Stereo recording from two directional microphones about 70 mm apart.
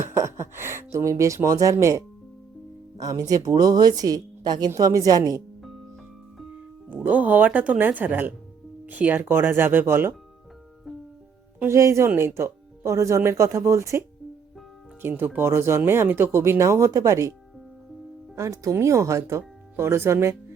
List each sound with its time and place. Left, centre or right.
0.1 s a sound: right
3.0 s a woman's voice: right
4.9 s a woman's voice: right
6.8 s speech: right
11.7 s speech: right
15.0 s speech: right
18.3 s speech: right
19.4 s speech: right